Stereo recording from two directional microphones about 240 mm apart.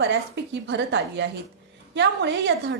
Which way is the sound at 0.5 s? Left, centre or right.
Right.